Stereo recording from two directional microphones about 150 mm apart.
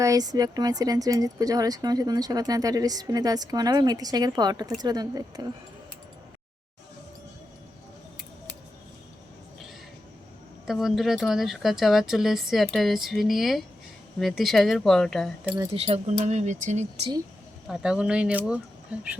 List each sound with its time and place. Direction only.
0.0 s speech: 25° right (ahead or behind)
10.7 s speech: centre (ahead or behind)
15.7 s speech: 45° right (ahead or behind)
17.7 s speech: 5° right (ahead or behind)